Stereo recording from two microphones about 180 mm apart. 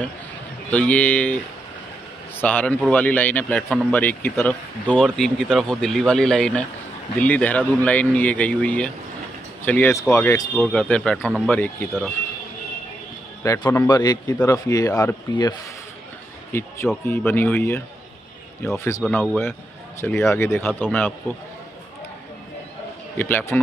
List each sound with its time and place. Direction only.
0.7 s speech: 5° left (ahead or behind)
10.5 s speech: 5° left (ahead or behind)
13.4 s a man's voice: 15° left (ahead or behind)
16.5 s speech: 15° left (ahead or behind)
23.1 s speech: 10° left (ahead or behind)